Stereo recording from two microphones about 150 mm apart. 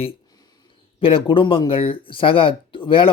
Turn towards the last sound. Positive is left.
turn(degrees=35)  # may be behind; listen again after turning